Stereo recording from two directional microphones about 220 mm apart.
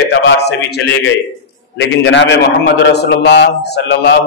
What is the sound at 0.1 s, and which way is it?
A man's voice, 50° left (ahead or behind).